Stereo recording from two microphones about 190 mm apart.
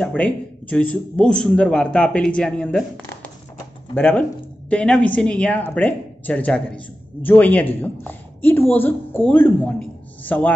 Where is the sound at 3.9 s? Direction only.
10° left (ahead or behind).